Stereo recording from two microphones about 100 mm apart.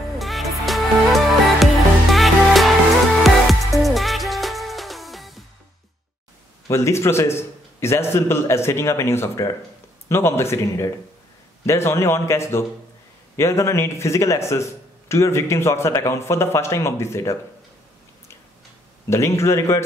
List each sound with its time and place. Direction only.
0.2 s music: centre (ahead or behind)
6.7 s a man's voice: 30° left (ahead or behind)
19.0 s a man's voice: 30° left (ahead or behind)